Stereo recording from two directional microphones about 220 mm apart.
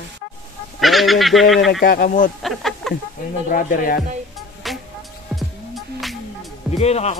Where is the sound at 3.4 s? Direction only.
35° left (ahead or behind).